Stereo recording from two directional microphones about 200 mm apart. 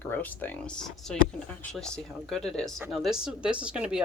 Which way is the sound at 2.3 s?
Centre (ahead or behind).